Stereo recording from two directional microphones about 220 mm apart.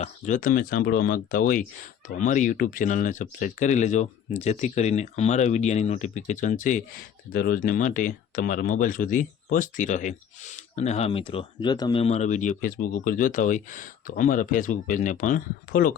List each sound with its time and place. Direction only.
0.0 s speech: 35° left (ahead or behind)